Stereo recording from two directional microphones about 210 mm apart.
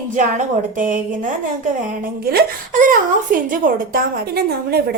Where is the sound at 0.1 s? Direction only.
35° right (ahead or behind).